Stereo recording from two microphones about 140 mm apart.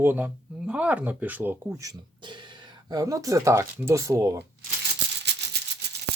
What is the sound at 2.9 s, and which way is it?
Speech, 25° right (ahead or behind).